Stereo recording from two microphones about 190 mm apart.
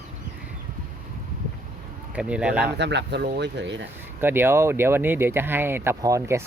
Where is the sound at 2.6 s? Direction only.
65° right (ahead or behind).